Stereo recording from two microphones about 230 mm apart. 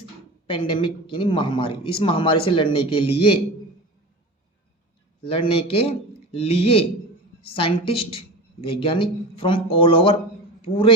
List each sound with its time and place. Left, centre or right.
0.5 s speech: left
5.2 s a woman's voice: left